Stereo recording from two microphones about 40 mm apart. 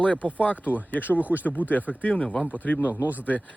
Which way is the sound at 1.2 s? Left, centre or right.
Right.